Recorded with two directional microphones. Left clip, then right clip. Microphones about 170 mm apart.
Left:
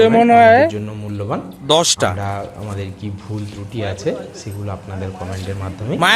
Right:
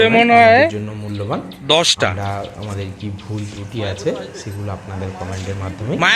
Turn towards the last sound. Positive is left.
turn(degrees=0)  # may be behind; listen again after turning